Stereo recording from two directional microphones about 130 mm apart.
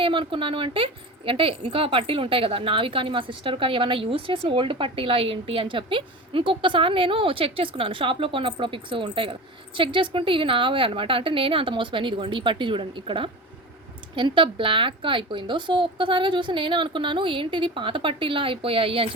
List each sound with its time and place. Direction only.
0.0 s a woman's voice: 40° right (ahead or behind)